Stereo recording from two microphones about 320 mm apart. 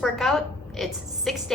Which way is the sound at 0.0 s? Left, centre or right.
Centre.